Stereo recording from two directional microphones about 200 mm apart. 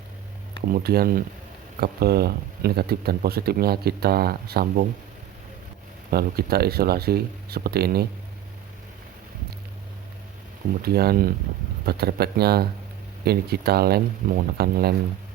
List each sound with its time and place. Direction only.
0.7 s speech: 50° right (ahead or behind)
6.1 s speech: 50° right (ahead or behind)
10.8 s speech: 50° right (ahead or behind)